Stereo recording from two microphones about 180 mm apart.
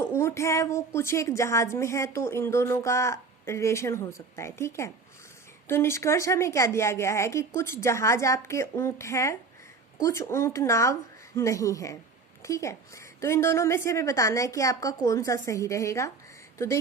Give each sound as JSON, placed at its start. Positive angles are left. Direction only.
{"t": 0.0, "sound": "a woman's voice", "side_deg": 15}